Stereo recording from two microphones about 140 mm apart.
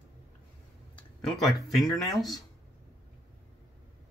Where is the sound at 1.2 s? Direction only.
Centre (ahead or behind).